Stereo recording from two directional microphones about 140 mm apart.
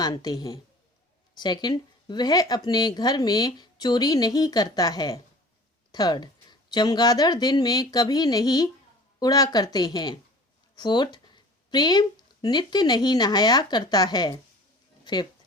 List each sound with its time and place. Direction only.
0.0 s a woman's voice: 25° left (ahead or behind)